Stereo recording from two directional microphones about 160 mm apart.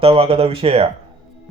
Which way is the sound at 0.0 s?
35° right (ahead or behind).